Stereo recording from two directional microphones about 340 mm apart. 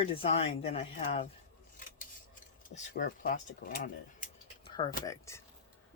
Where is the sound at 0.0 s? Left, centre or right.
Centre.